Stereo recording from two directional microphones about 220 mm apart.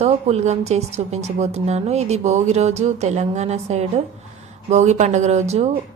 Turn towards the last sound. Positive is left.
turn(degrees=-30)  # may be behind; listen again after turning